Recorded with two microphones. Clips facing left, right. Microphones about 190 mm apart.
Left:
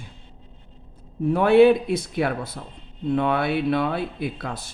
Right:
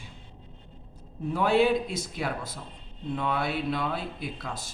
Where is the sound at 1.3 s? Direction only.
60° left (ahead or behind).